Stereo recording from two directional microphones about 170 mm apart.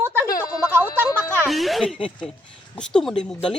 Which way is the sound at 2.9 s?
5° left (ahead or behind).